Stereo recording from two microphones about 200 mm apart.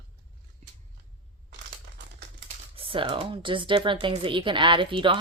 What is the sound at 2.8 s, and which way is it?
Speech, 25° right (ahead or behind).